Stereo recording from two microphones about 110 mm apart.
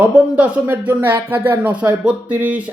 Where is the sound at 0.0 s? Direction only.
15° right (ahead or behind).